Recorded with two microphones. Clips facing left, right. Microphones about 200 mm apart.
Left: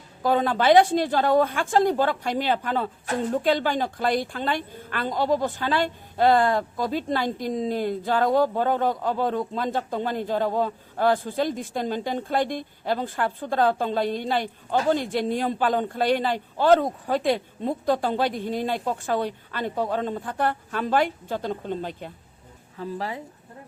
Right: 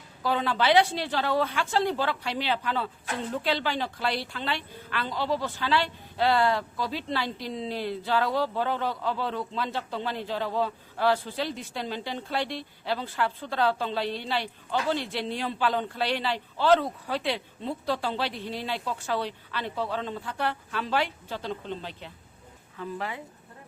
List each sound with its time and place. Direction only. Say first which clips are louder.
0.2 s a woman's voice: left 5 dB; 50° left (ahead or behind)
22.8 s speech: left 3 dB; 35° left (ahead or behind)